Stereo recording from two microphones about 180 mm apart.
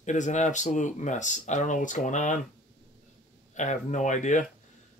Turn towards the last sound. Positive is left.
turn(degrees=45)  # may be behind; listen again after turning